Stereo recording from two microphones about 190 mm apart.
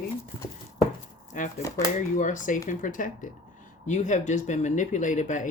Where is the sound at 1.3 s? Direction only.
40° left (ahead or behind).